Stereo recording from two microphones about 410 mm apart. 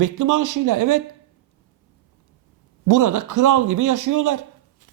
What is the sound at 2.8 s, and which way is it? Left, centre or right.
Speech, right.